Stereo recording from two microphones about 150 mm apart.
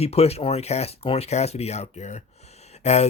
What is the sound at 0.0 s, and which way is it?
Speech, 45° left (ahead or behind).